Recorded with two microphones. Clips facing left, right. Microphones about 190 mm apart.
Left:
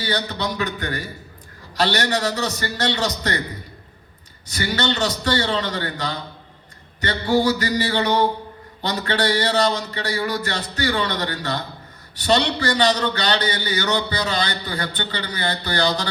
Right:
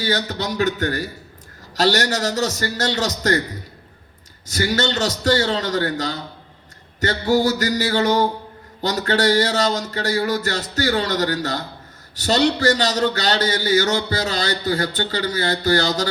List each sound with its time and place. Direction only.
0.0 s a man's voice: 45° right (ahead or behind)
4.4 s a man's voice: 45° right (ahead or behind)